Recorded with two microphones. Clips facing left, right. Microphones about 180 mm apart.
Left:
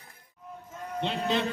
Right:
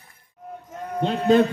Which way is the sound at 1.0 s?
45° right (ahead or behind).